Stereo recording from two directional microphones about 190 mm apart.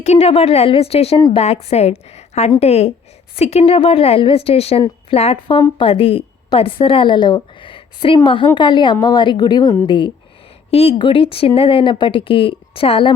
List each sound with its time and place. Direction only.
0.0 s a woman's voice: 35° left (ahead or behind)